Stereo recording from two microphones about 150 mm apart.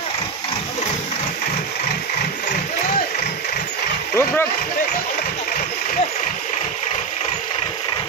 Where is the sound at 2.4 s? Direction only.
70° left (ahead or behind).